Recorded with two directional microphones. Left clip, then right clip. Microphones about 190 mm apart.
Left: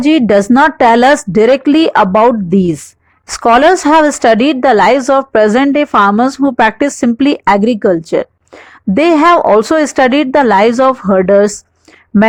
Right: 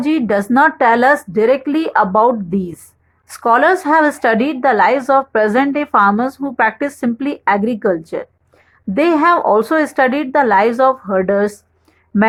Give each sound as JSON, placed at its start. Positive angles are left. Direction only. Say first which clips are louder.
{"t": 0.0, "sound": "a woman's voice", "louder": "left 7 dB", "side_deg": 40}